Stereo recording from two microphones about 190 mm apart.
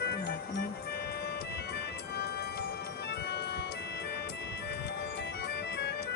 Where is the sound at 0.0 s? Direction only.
55° left (ahead or behind).